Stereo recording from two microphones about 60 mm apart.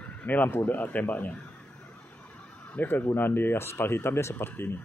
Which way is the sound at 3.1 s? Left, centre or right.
Left.